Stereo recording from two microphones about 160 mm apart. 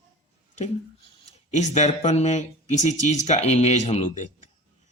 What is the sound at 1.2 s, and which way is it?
Speech, 45° left (ahead or behind).